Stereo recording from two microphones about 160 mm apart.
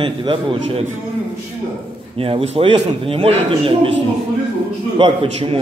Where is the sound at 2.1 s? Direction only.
35° right (ahead or behind).